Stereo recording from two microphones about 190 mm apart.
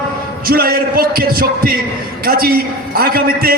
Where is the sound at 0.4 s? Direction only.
50° right (ahead or behind).